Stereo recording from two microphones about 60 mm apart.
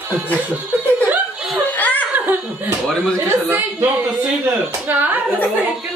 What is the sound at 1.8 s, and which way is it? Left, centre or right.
Laughter, left.